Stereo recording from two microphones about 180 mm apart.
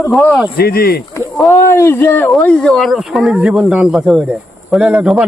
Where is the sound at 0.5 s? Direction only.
60° left (ahead or behind).